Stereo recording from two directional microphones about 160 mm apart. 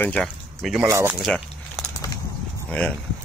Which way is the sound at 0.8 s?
20° right (ahead or behind).